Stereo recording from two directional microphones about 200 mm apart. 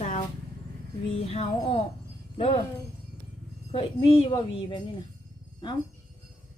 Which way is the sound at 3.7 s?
30° left (ahead or behind).